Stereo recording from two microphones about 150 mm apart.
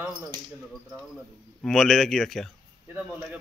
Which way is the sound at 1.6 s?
Centre (ahead or behind).